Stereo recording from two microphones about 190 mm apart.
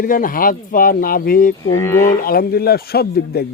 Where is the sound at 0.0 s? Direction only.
45° left (ahead or behind).